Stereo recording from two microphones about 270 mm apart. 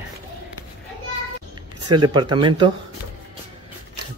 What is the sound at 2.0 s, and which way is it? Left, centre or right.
Speech, centre.